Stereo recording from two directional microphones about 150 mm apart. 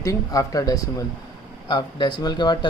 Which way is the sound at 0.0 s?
25° left (ahead or behind).